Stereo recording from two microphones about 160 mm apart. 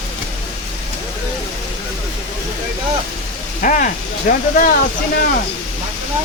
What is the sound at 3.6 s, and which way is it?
Speech, 55° left (ahead or behind).